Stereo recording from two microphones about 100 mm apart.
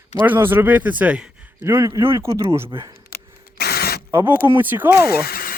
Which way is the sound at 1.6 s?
25° right (ahead or behind).